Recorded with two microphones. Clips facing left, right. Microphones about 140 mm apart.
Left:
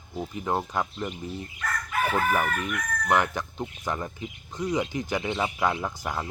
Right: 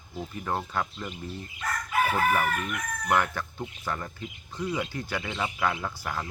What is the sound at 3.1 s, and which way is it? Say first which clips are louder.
Speech: left 2 dB; 15° left (ahead or behind).